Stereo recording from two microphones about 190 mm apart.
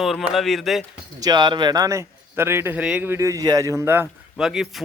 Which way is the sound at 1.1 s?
20° right (ahead or behind).